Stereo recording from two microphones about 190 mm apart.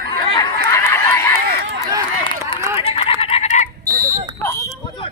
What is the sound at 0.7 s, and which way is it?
Run, 15° left (ahead or behind).